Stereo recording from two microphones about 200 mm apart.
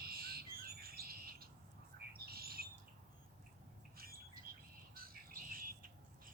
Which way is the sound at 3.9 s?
45° right (ahead or behind).